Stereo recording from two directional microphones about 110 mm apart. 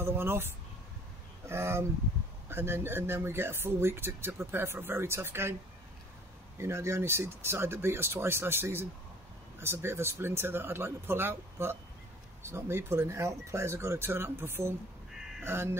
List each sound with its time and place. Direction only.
0.0 s speech: 20° right (ahead or behind)
1.5 s speech: 20° right (ahead or behind)
6.6 s speech: 25° right (ahead or behind)